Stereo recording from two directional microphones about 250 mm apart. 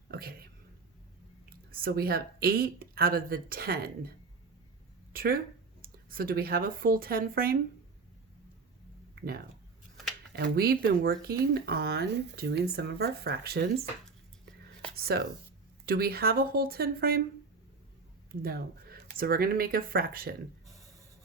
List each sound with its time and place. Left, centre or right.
0.1 s a sound: right
1.5 s speech: right
5.1 s speech: right
10.3 s speech: right
14.9 s speech: right
18.3 s speech: right
20.7 s a sound: centre